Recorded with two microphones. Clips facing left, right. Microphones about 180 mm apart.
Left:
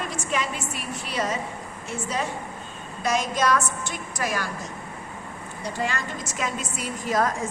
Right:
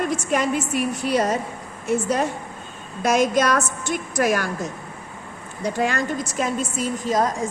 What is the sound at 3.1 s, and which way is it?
A woman's voice, 45° right (ahead or behind).